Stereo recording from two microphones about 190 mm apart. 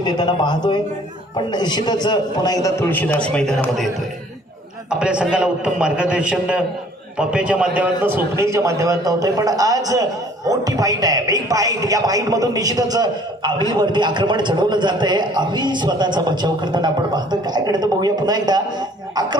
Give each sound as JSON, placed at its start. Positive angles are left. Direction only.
{"t": 0.0, "sound": "a man's voice", "side_deg": 20}
{"t": 4.9, "sound": "a man's voice", "side_deg": -5}